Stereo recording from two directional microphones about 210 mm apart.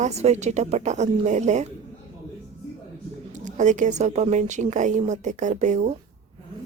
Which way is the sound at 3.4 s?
35° right (ahead or behind).